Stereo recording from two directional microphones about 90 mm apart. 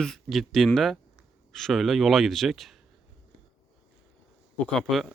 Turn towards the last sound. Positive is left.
turn(degrees=0)  # may be behind; listen again after turning